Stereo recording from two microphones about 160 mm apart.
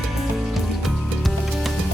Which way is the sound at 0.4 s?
Centre (ahead or behind).